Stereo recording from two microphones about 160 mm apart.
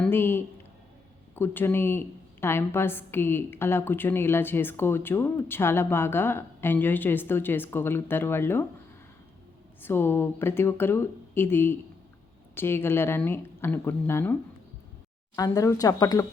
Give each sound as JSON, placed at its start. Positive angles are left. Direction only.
{"t": 0.0, "sound": "a man's voice", "side_deg": 15}
{"t": 9.8, "sound": "a woman's voice", "side_deg": 15}
{"t": 15.4, "sound": "speech", "side_deg": 20}